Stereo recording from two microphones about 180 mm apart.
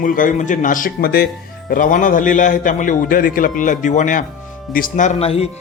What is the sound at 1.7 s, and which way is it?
Speech, 45° left (ahead or behind).